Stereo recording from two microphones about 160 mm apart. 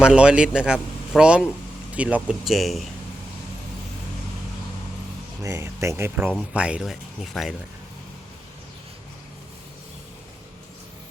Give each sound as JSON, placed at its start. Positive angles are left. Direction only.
{"t": 0.0, "sound": "a man's voice", "side_deg": -5}
{"t": 5.4, "sound": "a man's voice", "side_deg": -15}